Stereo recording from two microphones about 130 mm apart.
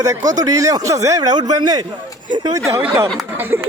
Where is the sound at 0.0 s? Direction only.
25° right (ahead or behind).